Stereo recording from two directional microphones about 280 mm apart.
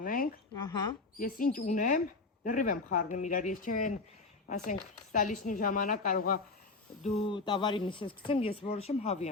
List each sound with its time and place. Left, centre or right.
0.0 s a sound: left
0.5 s speech: centre
1.2 s speech: left
7.3 s speech: centre